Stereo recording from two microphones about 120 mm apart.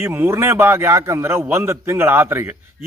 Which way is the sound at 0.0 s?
20° right (ahead or behind).